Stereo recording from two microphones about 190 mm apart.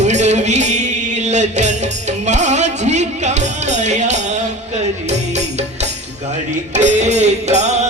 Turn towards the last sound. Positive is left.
turn(degrees=-35)  # may be behind; listen again after turning